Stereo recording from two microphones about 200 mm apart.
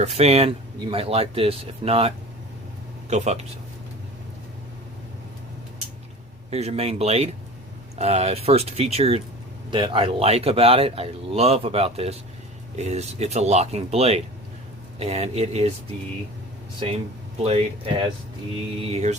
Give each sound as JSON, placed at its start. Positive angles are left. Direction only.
{"t": 0.0, "sound": "speech", "side_deg": -30}
{"t": 6.5, "sound": "speech", "side_deg": -30}
{"t": 17.3, "sound": "speech", "side_deg": -30}